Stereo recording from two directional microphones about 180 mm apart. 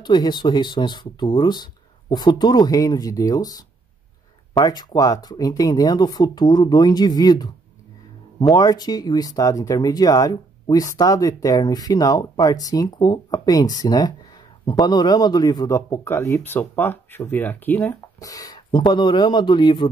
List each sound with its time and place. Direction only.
0.0 s speech: 25° left (ahead or behind)